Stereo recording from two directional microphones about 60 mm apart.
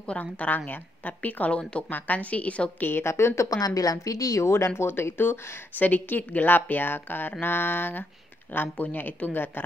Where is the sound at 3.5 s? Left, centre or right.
Left.